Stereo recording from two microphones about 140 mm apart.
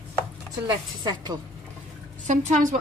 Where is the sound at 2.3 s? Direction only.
60° right (ahead or behind).